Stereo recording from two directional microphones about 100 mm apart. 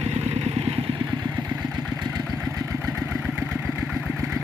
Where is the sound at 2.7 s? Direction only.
30° right (ahead or behind).